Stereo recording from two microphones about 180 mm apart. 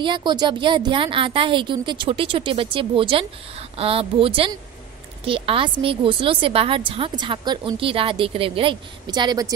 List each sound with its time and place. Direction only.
0.0 s a woman's voice: 25° right (ahead or behind)